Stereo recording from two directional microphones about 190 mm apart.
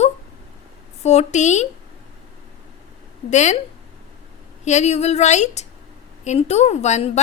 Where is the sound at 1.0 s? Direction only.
35° left (ahead or behind).